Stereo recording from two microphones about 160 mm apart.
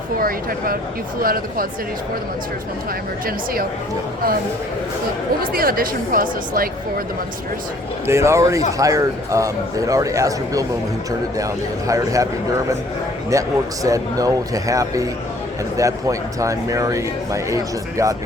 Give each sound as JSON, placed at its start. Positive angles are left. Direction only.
{"t": 0.2, "sound": "speech", "side_deg": -65}
{"t": 3.2, "sound": "speech", "side_deg": -65}
{"t": 5.4, "sound": "speech", "side_deg": -65}
{"t": 8.0, "sound": "a man's voice", "side_deg": -15}
{"t": 13.3, "sound": "a man's voice", "side_deg": -20}